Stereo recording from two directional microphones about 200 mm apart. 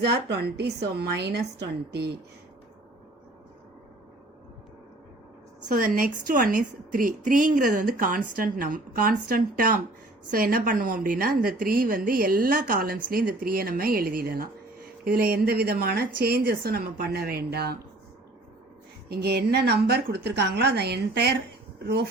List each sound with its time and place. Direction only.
0.0 s a woman's voice: 55° right (ahead or behind)
5.6 s a woman's voice: 40° right (ahead or behind)
19.0 s a woman's voice: 55° right (ahead or behind)